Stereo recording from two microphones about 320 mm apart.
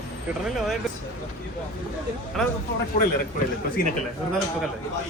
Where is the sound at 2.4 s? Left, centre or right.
Centre.